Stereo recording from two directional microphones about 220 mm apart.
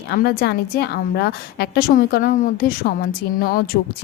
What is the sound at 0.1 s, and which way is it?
Speech, 45° left (ahead or behind).